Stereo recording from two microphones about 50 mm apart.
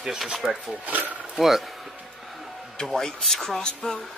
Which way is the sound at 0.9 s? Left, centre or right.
Right.